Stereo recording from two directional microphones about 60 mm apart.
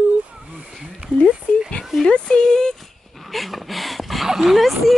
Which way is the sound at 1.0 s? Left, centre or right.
Right.